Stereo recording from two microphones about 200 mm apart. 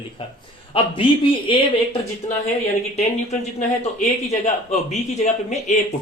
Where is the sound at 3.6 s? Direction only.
35° left (ahead or behind).